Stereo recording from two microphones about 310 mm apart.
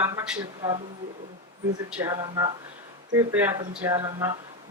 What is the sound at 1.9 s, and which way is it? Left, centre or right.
Speech, centre.